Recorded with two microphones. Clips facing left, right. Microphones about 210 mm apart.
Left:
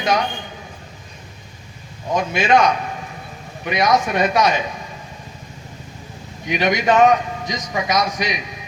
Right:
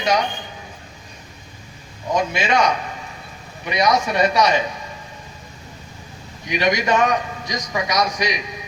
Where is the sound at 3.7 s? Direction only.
50° left (ahead or behind).